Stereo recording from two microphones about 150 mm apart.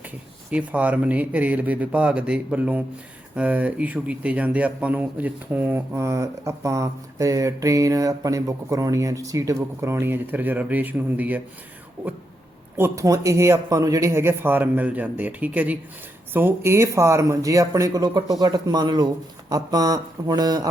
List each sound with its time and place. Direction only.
0.5 s speech: 10° right (ahead or behind); by 20.7 s 25° right (ahead or behind)